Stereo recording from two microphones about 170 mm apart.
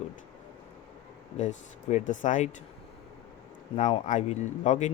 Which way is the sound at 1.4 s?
45° left (ahead or behind).